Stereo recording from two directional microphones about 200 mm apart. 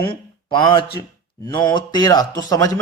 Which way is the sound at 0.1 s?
25° left (ahead or behind).